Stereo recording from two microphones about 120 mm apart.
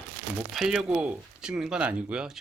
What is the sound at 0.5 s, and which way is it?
Speech, 5° right (ahead or behind).